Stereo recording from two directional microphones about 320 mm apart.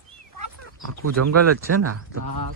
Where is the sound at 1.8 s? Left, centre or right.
Right.